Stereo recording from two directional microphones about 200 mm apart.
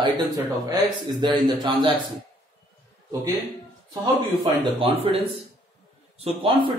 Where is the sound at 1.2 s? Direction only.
20° right (ahead or behind).